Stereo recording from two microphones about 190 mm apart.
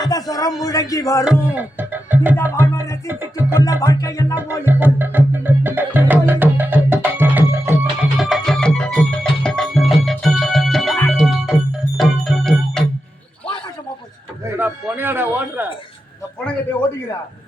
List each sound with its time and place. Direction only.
0.0 s speech: 20° left (ahead or behind)
1.2 s speech: 5° right (ahead or behind)
2.3 s music: 15° left (ahead or behind)
4.6 s music: 10° right (ahead or behind)
8.2 s music: centre (ahead or behind)
14.4 s a sound: 10° right (ahead or behind)